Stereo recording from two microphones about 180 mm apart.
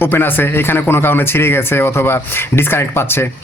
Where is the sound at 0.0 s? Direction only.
10° left (ahead or behind).